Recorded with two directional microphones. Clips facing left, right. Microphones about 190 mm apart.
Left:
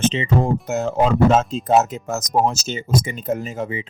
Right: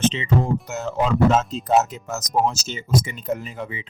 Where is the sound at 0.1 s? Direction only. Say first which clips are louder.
Left 2 dB; 50° left (ahead or behind).